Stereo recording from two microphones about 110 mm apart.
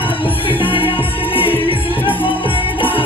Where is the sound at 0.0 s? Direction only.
50° left (ahead or behind).